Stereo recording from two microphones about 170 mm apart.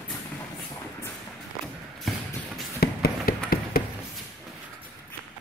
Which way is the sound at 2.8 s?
60° left (ahead or behind).